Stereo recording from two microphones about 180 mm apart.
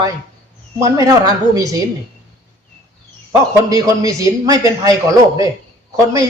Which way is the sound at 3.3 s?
20° right (ahead or behind).